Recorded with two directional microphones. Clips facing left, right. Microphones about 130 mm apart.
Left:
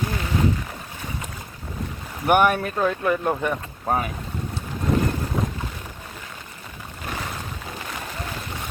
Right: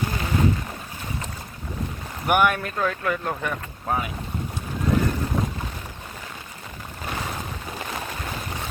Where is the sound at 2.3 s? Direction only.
30° left (ahead or behind).